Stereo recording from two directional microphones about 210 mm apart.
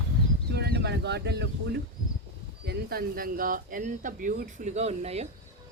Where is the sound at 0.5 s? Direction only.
50° right (ahead or behind); by 5.3 s 30° right (ahead or behind).